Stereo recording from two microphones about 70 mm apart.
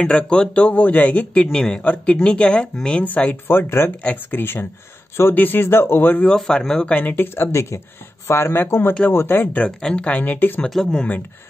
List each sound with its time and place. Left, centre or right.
0.0 s a man's voice: centre; by 6.2 s left
6.2 s speech: centre
6.9 s a man's voice: left
8.3 s a man's voice: left
9.7 s a man's voice: centre
10.7 s speech: centre